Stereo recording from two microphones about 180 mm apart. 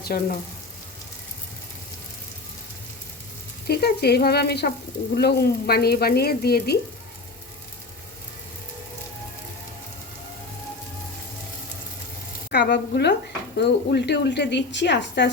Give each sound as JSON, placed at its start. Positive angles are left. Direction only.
{"t": 0.1, "sound": "speech", "side_deg": 50}
{"t": 3.7, "sound": "speech", "side_deg": 65}
{"t": 12.5, "sound": "a woman's voice", "side_deg": 70}